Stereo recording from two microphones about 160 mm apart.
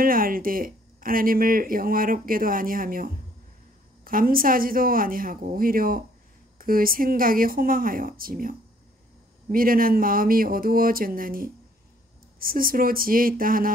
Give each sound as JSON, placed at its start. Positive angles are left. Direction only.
{"t": 0.0, "sound": "speech", "side_deg": -65}